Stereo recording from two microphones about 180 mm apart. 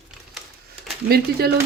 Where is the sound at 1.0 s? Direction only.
60° right (ahead or behind).